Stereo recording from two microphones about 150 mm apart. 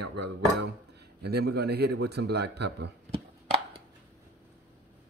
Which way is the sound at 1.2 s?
90° right.